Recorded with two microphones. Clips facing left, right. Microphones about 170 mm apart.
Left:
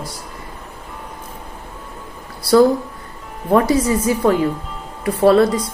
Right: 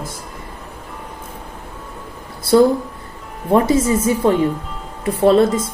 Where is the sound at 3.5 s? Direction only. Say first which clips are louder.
Even; 25° right (ahead or behind).